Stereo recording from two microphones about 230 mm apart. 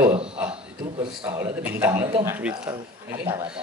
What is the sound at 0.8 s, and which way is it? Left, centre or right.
Speech, right.